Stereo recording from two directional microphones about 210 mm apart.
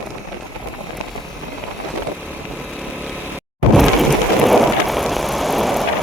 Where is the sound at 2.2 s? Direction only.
5° right (ahead or behind).